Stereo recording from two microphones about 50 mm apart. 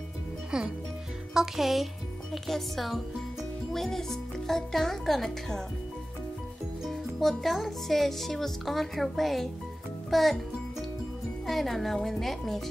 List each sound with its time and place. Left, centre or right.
0.5 s speech: centre
1.3 s speech: centre
6.9 s speech: centre
11.4 s speech: centre